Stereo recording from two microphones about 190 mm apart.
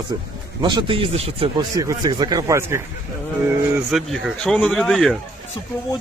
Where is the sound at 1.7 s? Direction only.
20° right (ahead or behind).